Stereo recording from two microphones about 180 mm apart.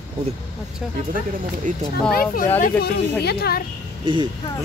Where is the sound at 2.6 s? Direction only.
65° left (ahead or behind).